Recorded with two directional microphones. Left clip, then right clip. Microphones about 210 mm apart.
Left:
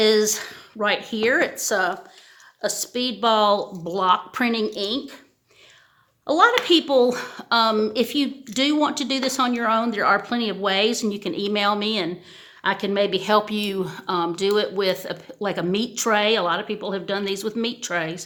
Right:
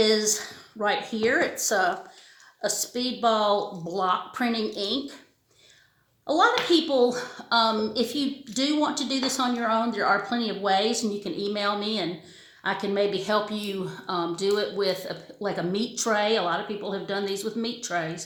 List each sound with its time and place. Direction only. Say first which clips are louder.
0.0 s speech: left 4 dB; 35° left (ahead or behind)
6.2 s speech: left 4 dB; 35° left (ahead or behind)